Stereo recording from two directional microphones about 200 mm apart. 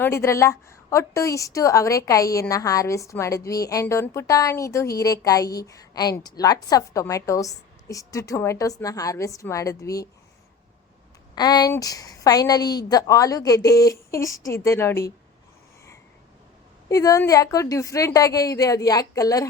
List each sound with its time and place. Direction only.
0.0 s a woman's voice: 15° left (ahead or behind)
11.3 s a woman's voice: 20° left (ahead or behind)
16.9 s a woman's voice: 15° left (ahead or behind)